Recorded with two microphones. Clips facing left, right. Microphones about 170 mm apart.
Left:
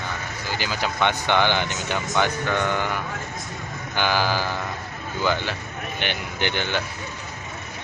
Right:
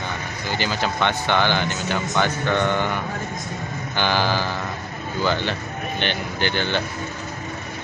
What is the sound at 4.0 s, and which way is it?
Speech, 10° left (ahead or behind).